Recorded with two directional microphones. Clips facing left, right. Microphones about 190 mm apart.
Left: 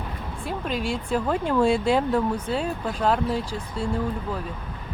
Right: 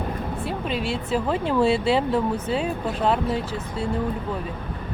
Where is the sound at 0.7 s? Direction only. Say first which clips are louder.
Even; 45° left (ahead or behind).